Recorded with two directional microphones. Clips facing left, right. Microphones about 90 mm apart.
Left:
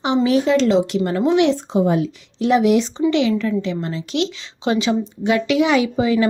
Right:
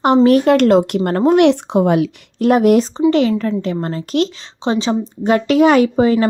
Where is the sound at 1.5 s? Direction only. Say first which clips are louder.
Right 4 dB; 65° right (ahead or behind).